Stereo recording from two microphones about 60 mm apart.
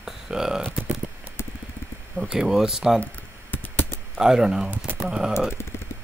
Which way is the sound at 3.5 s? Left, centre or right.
Left.